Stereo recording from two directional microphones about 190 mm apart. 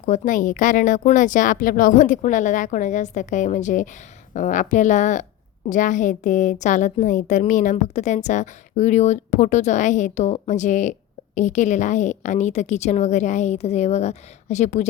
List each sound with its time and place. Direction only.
0.0 s a woman's voice: 40° left (ahead or behind)